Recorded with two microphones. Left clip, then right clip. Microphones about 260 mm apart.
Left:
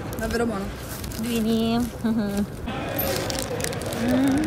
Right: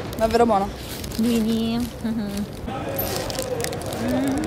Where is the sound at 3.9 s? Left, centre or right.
Centre.